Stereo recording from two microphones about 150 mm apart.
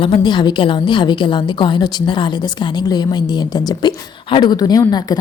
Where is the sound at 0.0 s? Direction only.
30° left (ahead or behind).